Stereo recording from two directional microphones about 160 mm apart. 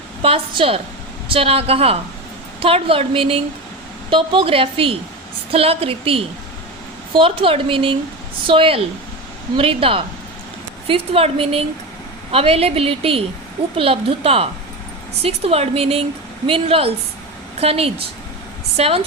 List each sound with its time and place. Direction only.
0.2 s a woman's voice: 35° right (ahead or behind)